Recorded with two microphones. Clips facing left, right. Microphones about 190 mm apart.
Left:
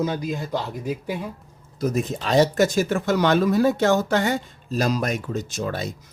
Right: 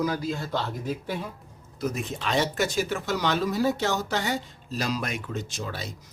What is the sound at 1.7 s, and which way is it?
Speech, 40° left (ahead or behind).